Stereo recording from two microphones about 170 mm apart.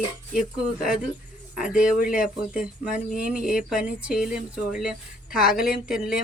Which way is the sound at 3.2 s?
5° right (ahead or behind).